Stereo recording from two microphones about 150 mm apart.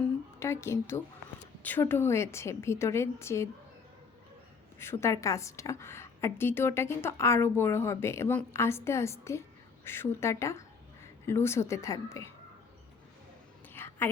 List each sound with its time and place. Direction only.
0.3 s a woman's voice: 20° left (ahead or behind)
4.8 s a woman's voice: 15° left (ahead or behind)
13.7 s whispering: 15° left (ahead or behind)